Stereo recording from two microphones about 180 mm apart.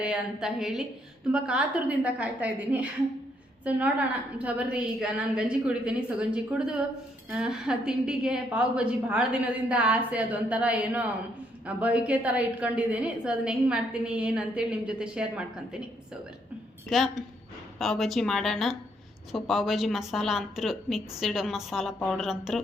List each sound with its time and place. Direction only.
0.0 s a woman's voice: 5° right (ahead or behind)
16.9 s speech: centre (ahead or behind)